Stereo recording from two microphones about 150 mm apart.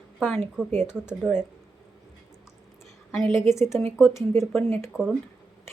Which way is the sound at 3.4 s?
20° left (ahead or behind).